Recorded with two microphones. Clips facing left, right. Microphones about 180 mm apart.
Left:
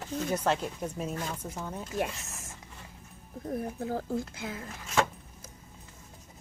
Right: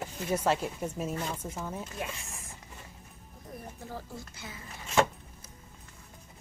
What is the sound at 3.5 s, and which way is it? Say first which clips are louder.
Speech: left 10 dB; 55° left (ahead or behind).